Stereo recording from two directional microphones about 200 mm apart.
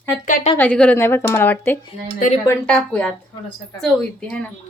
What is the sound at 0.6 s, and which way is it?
A woman's voice, 5° left (ahead or behind).